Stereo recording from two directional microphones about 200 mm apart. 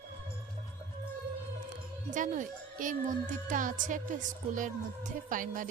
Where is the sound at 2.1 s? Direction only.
40° right (ahead or behind).